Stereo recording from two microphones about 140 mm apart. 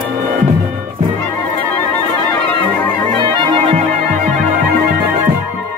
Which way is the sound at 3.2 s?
35° right (ahead or behind).